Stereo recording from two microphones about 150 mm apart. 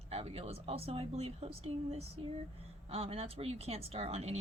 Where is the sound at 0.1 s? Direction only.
45° right (ahead or behind).